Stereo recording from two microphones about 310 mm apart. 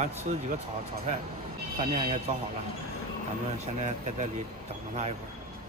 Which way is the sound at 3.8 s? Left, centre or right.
Right.